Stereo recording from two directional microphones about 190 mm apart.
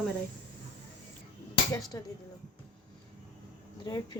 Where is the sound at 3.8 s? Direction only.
20° left (ahead or behind).